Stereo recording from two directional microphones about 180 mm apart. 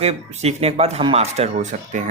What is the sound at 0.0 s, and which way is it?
Speech, 35° right (ahead or behind).